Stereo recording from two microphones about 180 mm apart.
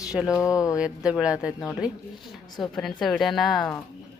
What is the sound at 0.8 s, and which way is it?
Speech, 5° right (ahead or behind).